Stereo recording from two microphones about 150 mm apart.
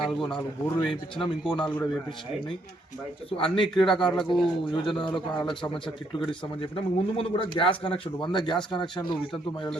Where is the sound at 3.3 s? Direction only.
35° left (ahead or behind).